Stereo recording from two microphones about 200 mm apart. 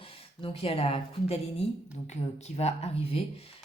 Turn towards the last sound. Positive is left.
turn(degrees=30)  # may be behind; listen again after turning